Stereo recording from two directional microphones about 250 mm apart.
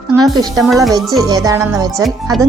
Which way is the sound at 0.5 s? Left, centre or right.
Centre.